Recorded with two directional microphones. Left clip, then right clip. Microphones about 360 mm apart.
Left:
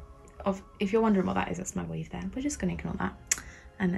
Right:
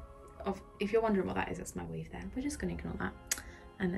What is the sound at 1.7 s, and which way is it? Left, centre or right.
Speech, centre.